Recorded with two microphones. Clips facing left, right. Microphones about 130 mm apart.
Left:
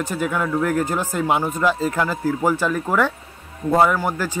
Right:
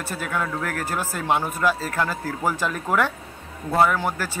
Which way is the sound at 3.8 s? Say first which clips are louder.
Left 3 dB; 10° left (ahead or behind).